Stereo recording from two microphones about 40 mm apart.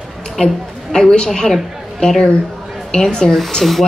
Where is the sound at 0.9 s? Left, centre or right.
Centre.